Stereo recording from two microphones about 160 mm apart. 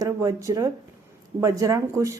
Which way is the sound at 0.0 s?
20° right (ahead or behind).